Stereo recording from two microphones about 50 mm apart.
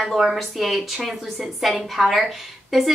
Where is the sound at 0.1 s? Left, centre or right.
Centre.